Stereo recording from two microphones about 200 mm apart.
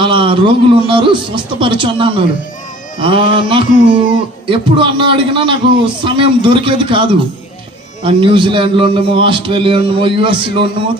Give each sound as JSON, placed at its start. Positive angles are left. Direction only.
{"t": 0.0, "sound": "a man's voice", "side_deg": -25}